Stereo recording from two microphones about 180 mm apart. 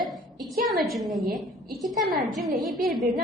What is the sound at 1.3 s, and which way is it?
Speech, 55° right (ahead or behind).